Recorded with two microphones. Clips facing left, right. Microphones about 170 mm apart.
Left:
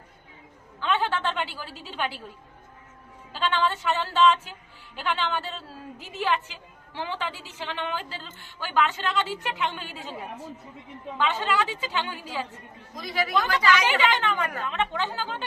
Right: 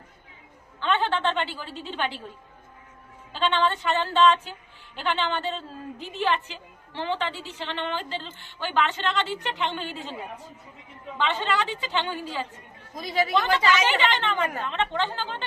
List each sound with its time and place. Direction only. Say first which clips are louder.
0.8 s a woman's voice: right 1 dB; 5° left (ahead or behind)
3.3 s a woman's voice: right 2 dB; centre (ahead or behind)
11.2 s a woman's voice: even; 5° left (ahead or behind)
13.0 s speech: right 2 dB; 25° right (ahead or behind)
13.8 s a woman's voice: even; 5° left (ahead or behind)